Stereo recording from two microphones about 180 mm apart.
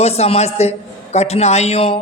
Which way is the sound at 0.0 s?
35° left (ahead or behind).